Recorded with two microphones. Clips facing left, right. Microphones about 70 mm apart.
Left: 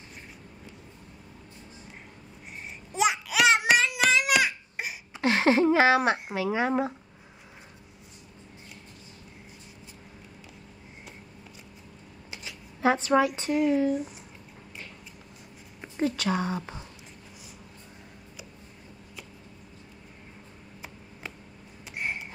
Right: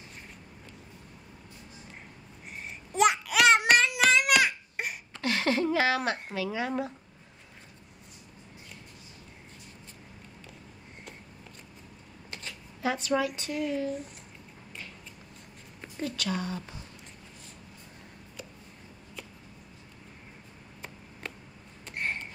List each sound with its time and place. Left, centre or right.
2.9 s babbling: centre
5.2 s a sound: left
6.3 s speech: left
12.8 s speech: left
16.0 s speech: left
21.9 s a sound: centre